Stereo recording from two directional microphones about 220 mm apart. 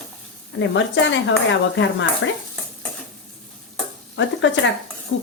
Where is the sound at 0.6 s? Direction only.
55° left (ahead or behind).